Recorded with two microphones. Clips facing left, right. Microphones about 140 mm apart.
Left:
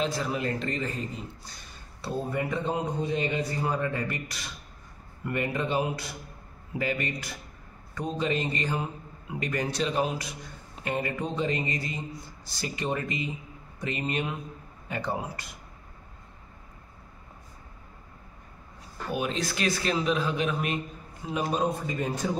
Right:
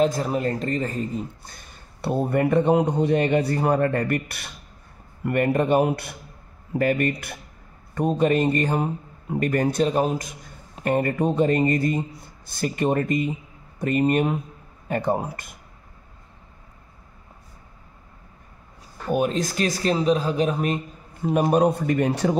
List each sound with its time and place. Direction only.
0.0 s a man's voice: 45° right (ahead or behind)
19.0 s a man's voice: 45° right (ahead or behind); by 22.4 s 70° right (ahead or behind)